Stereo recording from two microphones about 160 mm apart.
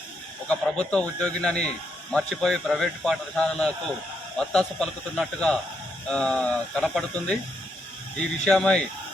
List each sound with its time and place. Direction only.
0.4 s speech: 5° left (ahead or behind)
8.4 s speech: 5° left (ahead or behind)